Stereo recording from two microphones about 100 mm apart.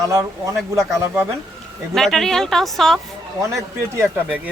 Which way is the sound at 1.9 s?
5° left (ahead or behind).